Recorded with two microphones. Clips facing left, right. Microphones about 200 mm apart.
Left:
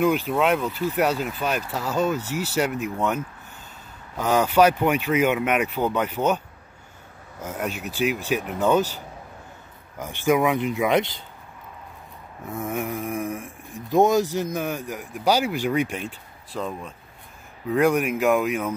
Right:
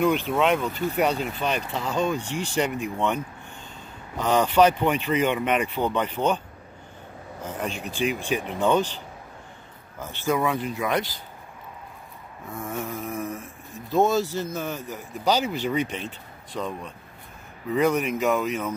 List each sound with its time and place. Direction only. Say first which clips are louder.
0.3 s speech: left 1 dB; centre (ahead or behind)
4.2 s speech: left 1 dB; 10° left (ahead or behind)
7.4 s speech: left 2 dB; 10° left (ahead or behind); by 11.2 s 25° left (ahead or behind)
12.4 s speech: left 4 dB; 20° left (ahead or behind)